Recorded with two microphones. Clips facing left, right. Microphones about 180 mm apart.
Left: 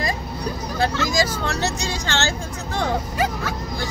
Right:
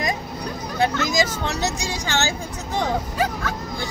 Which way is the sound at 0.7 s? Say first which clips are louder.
Right 1 dB; 20° right (ahead or behind).